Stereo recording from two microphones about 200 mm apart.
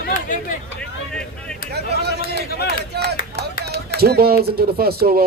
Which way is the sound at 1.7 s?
55° right (ahead or behind).